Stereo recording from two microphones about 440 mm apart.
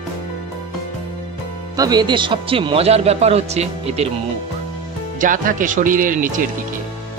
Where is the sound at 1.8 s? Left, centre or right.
Centre.